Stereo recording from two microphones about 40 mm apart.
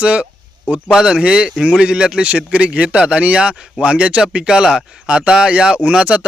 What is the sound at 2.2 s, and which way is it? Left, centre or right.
A man's voice, right.